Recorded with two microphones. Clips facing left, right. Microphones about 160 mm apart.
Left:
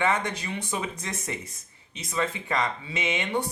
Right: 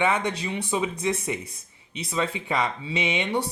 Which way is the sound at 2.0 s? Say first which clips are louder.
Right 2 dB; 20° right (ahead or behind).